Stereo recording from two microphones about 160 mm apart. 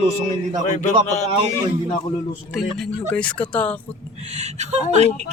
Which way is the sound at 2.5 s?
5° left (ahead or behind).